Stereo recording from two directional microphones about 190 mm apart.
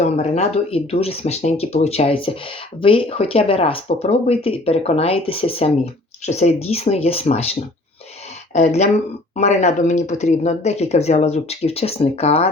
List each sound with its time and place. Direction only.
0.0 s speech: 35° left (ahead or behind)
8.5 s speech: 35° left (ahead or behind)